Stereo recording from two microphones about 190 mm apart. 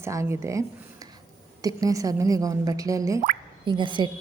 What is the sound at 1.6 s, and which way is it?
A woman's voice, 20° right (ahead or behind).